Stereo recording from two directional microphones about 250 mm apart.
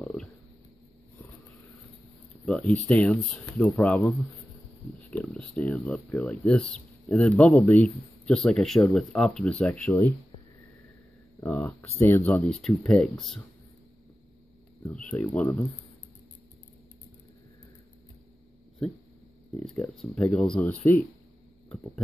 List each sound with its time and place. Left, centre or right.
0.0 s a sound: centre
2.4 s speech: centre
5.1 s speech: centre
11.4 s speech: centre
14.8 s speech: centre
19.6 s speech: centre